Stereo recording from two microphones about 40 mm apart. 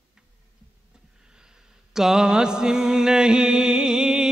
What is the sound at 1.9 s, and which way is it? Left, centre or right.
Mantra, centre.